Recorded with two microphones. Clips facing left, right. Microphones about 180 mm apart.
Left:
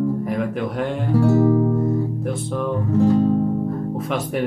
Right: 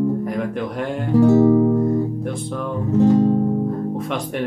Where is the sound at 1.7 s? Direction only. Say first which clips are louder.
Right 3 dB; centre (ahead or behind).